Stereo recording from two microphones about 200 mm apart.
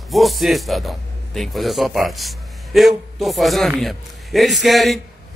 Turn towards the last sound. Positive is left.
turn(degrees=0)  # may be behind; listen again after turning